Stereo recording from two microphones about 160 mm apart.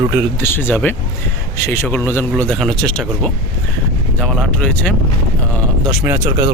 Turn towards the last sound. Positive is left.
turn(degrees=-15)  # may be behind; listen again after turning